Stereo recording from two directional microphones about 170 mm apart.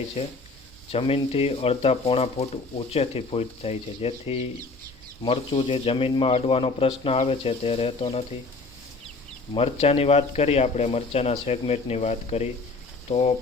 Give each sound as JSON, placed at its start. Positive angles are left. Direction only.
{"t": 0.2, "sound": "speech", "side_deg": 35}
{"t": 9.6, "sound": "speech", "side_deg": 35}